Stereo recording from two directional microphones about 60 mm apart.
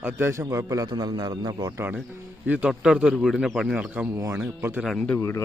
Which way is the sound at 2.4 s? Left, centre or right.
Right.